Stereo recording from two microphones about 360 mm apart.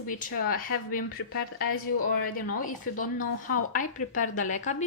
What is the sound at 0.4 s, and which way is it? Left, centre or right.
A woman's voice, left.